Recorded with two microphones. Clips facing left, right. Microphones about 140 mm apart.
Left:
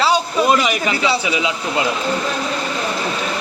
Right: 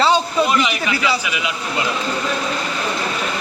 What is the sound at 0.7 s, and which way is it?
Speech, 30° left (ahead or behind).